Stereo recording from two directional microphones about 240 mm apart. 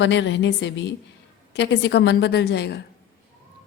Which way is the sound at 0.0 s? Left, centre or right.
Left.